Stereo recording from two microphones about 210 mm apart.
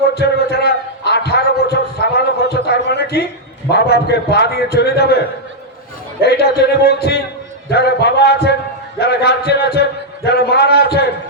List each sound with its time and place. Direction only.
0.1 s a sound: 50° left (ahead or behind)
3.7 s a man's voice: 50° left (ahead or behind)
6.2 s a man's voice: 50° left (ahead or behind)